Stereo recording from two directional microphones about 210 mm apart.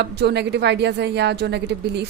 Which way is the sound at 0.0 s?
50° right (ahead or behind).